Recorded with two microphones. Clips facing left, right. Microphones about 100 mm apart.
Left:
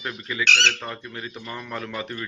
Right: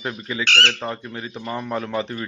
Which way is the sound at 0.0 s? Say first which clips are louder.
Right 1 dB; 25° right (ahead or behind).